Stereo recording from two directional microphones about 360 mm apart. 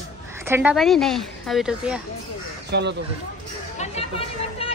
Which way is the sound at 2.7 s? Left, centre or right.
Right.